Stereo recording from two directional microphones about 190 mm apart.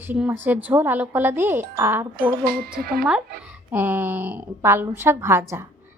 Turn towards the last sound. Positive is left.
turn(degrees=-15)  # may be behind; listen again after turning